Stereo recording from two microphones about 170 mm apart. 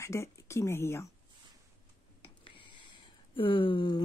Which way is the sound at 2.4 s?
30° left (ahead or behind).